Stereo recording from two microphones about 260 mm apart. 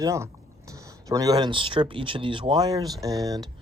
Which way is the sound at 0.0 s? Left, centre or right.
Centre.